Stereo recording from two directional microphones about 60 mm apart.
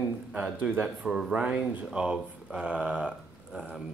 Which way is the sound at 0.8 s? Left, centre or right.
Centre.